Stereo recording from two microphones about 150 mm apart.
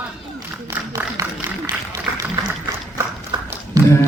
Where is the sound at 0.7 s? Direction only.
15° right (ahead or behind).